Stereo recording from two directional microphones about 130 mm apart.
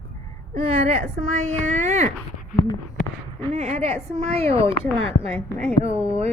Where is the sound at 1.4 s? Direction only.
65° right (ahead or behind).